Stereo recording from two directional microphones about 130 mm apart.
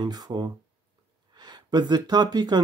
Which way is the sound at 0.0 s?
30° right (ahead or behind).